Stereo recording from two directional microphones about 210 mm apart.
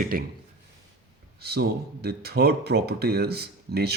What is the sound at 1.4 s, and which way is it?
Speech, 50° right (ahead or behind).